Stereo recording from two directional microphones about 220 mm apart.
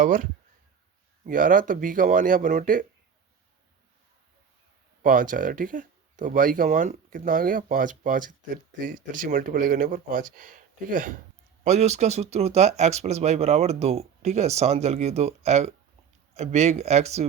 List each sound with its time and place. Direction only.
0.0 s speech: 35° right (ahead or behind)
5.0 s speech: 40° right (ahead or behind)